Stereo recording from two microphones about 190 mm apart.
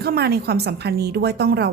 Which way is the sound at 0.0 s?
55° right (ahead or behind).